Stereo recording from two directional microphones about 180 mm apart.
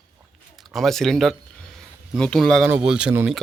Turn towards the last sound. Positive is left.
turn(degrees=-5)  # may be behind; listen again after turning